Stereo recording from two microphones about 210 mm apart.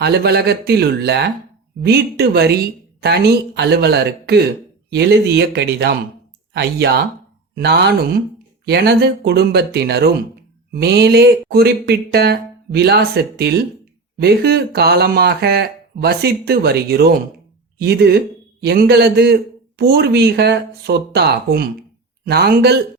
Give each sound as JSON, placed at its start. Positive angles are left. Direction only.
{"t": 0.0, "sound": "speech", "side_deg": -50}